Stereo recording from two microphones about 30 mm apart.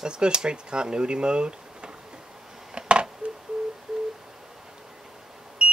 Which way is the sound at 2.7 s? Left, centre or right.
Right.